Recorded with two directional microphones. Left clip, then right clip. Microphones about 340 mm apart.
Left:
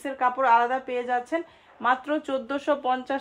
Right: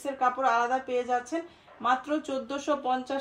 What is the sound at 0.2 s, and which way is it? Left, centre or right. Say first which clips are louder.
A woman's voice: left 5 dB; left.